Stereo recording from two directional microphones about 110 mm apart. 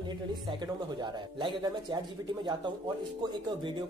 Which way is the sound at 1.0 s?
45° right (ahead or behind).